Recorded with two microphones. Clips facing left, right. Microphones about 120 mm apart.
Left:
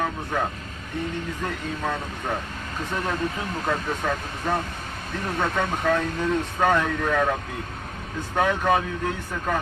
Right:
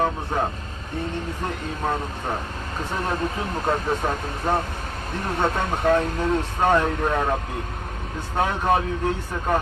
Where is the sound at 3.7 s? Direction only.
30° right (ahead or behind).